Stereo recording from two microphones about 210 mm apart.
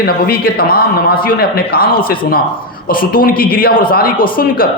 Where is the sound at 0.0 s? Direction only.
45° left (ahead or behind).